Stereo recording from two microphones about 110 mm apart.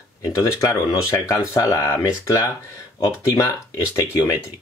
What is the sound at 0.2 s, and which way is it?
Speech, 35° left (ahead or behind).